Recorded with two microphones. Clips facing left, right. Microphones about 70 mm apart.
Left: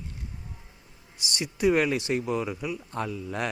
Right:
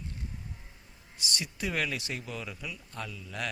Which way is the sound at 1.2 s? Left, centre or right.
Centre.